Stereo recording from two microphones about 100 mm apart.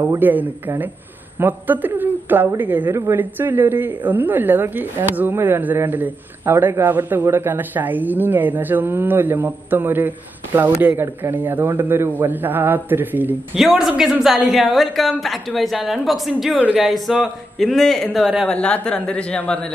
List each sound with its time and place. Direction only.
0.2 s a woman's voice: 20° right (ahead or behind)
13.6 s a woman's voice: 5° right (ahead or behind)
18.5 s a woman's voice: 10° left (ahead or behind)